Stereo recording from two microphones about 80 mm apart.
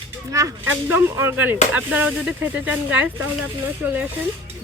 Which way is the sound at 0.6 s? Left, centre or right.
Right.